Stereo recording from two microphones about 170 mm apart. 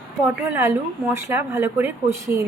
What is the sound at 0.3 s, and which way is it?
A woman's voice, 15° right (ahead or behind).